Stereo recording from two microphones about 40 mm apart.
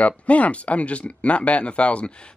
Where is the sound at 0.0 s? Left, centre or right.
Left.